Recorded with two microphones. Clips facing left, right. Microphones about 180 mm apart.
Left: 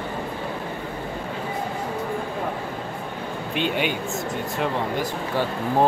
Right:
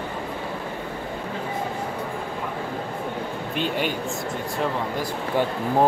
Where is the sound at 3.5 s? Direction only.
40° right (ahead or behind).